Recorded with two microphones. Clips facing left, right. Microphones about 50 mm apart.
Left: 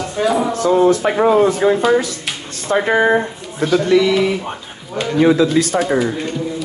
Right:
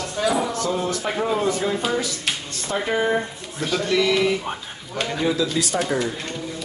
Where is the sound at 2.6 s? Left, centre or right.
Left.